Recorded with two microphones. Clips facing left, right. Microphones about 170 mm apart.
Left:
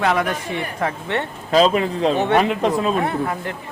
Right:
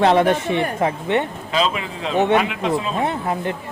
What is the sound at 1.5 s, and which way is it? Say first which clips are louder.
Speech: left 7 dB; 40° left (ahead or behind).